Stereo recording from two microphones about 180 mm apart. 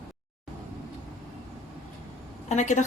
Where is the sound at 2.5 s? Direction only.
40° left (ahead or behind).